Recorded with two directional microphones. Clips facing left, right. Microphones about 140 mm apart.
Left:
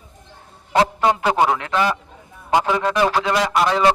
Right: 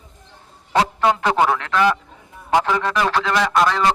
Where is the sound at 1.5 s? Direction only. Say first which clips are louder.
Right 2 dB; 15° left (ahead or behind).